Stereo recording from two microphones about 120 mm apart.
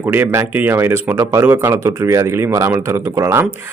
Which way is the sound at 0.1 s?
20° right (ahead or behind).